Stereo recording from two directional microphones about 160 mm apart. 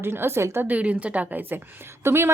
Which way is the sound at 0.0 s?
15° right (ahead or behind).